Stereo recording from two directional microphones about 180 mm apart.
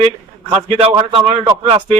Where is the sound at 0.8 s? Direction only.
30° right (ahead or behind).